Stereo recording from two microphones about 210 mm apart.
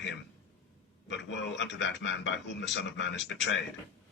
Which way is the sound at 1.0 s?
60° left (ahead or behind).